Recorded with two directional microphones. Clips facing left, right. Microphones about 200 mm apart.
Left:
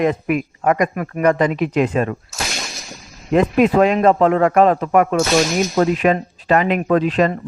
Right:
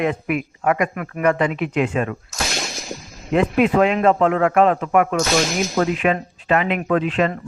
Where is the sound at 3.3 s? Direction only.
40° left (ahead or behind).